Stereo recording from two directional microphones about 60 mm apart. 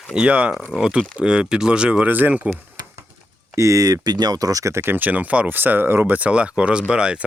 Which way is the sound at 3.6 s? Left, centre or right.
Right.